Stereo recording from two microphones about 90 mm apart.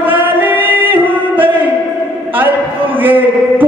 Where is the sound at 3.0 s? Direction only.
20° right (ahead or behind).